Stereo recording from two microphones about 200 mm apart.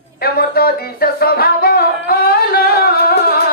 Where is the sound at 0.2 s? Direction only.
50° left (ahead or behind).